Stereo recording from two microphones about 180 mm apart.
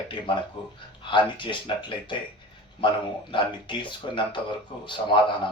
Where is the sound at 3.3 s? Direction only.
25° left (ahead or behind).